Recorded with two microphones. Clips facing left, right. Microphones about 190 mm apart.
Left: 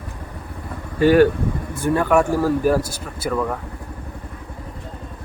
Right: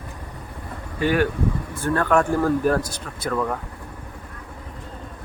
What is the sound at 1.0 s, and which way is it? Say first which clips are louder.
Speech: left 8 dB; 35° left (ahead or behind).